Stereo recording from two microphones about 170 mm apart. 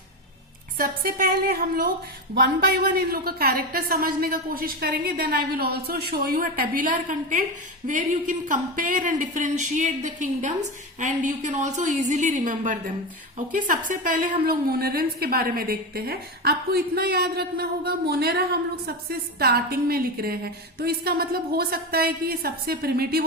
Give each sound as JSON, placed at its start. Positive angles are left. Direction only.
{"t": 0.8, "sound": "a woman's voice", "side_deg": -55}